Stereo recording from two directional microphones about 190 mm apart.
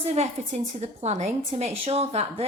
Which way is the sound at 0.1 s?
35° right (ahead or behind).